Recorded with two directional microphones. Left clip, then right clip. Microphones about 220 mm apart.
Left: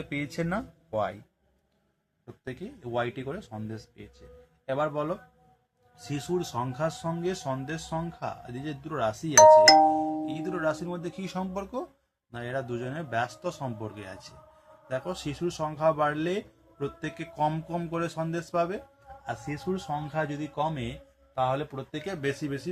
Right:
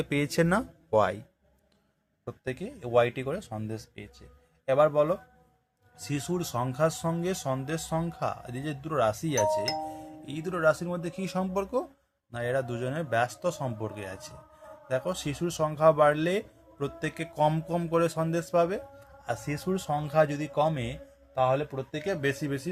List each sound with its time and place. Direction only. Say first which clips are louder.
0.0 s speech: right 6 dB; 45° right (ahead or behind)
2.2 s speech: right 5 dB; 45° right (ahead or behind)
9.3 s speech: left 13 dB; 45° left (ahead or behind)
10.2 s speech: right 3 dB; 35° right (ahead or behind)